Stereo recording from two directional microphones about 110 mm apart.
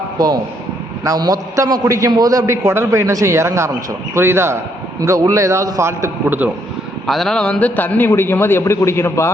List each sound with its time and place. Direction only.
1.0 s a man's voice: 35° right (ahead or behind)
7.1 s a man's voice: 5° left (ahead or behind); by 9.3 s 25° left (ahead or behind)